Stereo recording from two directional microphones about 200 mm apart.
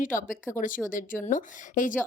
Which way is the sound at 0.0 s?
40° left (ahead or behind).